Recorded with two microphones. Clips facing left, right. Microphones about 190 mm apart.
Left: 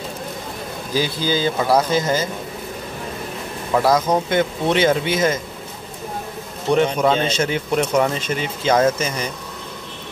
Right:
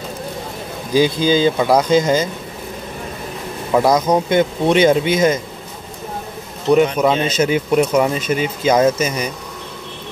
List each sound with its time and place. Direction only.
0.9 s speech: 20° right (ahead or behind)
3.7 s speech: 15° right (ahead or behind)
6.7 s speech: 5° right (ahead or behind)